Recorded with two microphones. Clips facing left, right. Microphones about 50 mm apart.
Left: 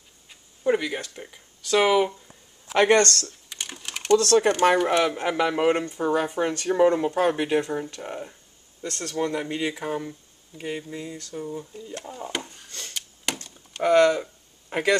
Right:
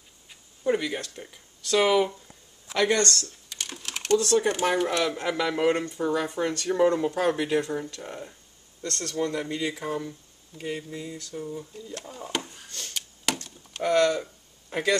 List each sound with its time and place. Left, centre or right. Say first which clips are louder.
0.7 s speech: left 2 dB; centre
2.7 s speech: left 5 dB; left
3.4 s typing: left 1 dB; centre
4.2 s speech: left 4 dB; left
4.9 s speech: left 4 dB; centre
12.9 s a sound: right 1 dB; centre
13.8 s speech: left 4 dB; left